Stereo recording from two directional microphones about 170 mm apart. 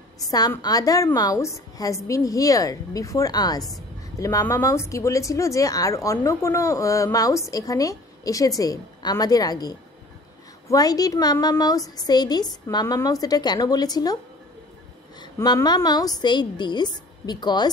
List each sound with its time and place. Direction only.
0.3 s speech: 20° left (ahead or behind)
15.1 s speech: 25° left (ahead or behind)